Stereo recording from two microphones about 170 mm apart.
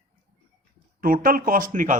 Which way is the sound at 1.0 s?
55° right (ahead or behind).